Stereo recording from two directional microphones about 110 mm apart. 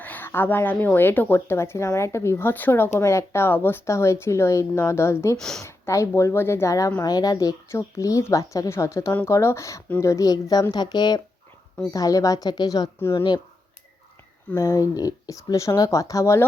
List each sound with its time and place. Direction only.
0.0 s speech: 15° left (ahead or behind)
5.4 s speech: 5° left (ahead or behind)
5.6 s a woman's voice: 25° left (ahead or behind)
13.0 s speech: 25° left (ahead or behind)
14.5 s speech: 30° left (ahead or behind)